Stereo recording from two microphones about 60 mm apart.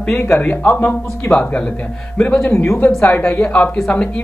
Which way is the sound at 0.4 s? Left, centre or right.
Left.